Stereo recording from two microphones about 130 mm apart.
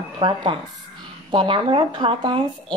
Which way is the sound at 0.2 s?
35° right (ahead or behind).